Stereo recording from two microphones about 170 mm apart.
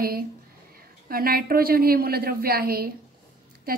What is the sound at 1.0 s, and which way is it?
A woman's voice, 60° right (ahead or behind).